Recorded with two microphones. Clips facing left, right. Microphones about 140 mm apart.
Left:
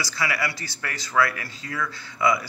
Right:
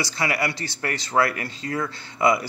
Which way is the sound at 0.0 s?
25° right (ahead or behind).